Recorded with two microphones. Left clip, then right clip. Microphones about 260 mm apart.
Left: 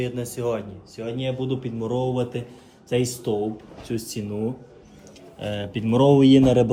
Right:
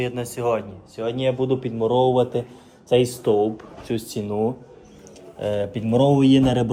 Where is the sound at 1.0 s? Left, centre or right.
Right.